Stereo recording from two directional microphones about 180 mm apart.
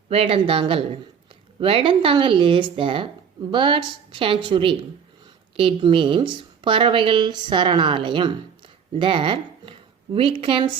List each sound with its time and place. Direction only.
0.1 s a woman's voice: 30° right (ahead or behind)